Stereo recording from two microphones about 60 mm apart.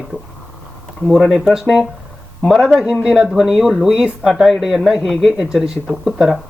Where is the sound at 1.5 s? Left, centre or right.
Centre.